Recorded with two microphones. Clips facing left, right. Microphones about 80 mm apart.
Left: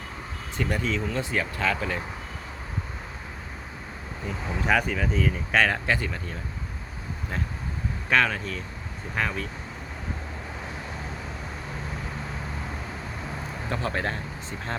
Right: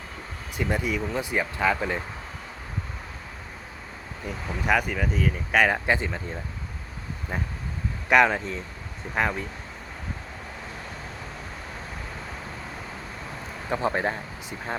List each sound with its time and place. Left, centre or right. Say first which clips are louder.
0.5 s speech: right 1 dB; centre
4.3 s speech: even; centre
8.1 s speech: right 4 dB; right
13.7 s speech: right 4 dB; centre